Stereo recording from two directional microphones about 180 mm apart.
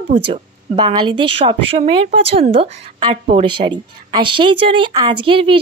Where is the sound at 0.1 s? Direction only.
25° right (ahead or behind).